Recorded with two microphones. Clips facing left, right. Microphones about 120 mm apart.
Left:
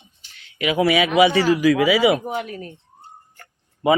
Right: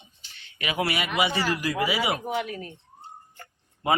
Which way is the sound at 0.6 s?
90° left.